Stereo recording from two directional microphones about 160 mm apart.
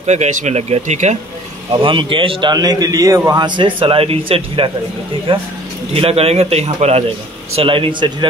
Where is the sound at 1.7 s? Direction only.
30° right (ahead or behind).